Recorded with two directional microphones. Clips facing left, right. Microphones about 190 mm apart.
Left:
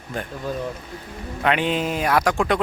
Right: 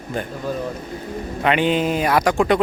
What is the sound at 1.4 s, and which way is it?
Speech, centre (ahead or behind).